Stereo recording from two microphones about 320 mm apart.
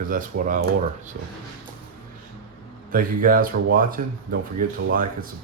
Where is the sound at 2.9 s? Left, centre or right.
Right.